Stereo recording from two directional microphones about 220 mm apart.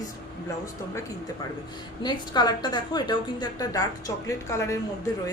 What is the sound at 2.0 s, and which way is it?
A woman's voice, 20° left (ahead or behind).